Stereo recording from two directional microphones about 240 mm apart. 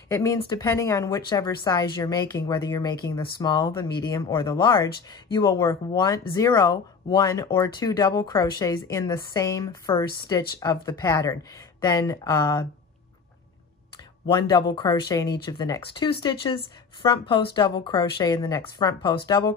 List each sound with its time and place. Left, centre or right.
0.1 s speech: centre
14.2 s speech: centre